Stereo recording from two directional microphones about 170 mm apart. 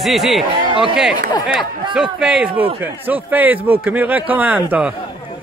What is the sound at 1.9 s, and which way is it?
Speech, 5° right (ahead or behind).